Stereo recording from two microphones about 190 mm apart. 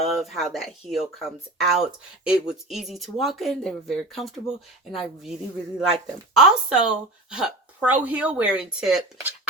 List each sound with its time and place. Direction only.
0.2 s speech: centre (ahead or behind)